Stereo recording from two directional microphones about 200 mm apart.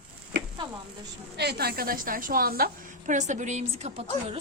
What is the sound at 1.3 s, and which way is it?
A woman's voice, 55° right (ahead or behind).